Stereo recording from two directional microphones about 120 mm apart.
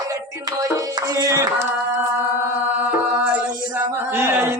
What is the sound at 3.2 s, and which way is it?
Music, 15° right (ahead or behind).